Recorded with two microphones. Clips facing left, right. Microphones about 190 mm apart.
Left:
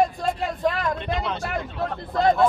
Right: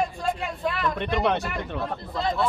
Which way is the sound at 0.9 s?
60° right (ahead or behind).